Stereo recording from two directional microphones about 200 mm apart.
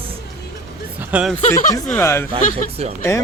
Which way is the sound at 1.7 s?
15° left (ahead or behind).